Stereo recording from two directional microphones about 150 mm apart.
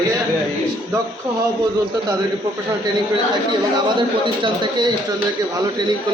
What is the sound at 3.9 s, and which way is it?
Speech, 30° right (ahead or behind).